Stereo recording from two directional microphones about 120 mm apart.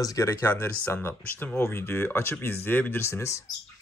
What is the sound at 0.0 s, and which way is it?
Speech, 25° left (ahead or behind).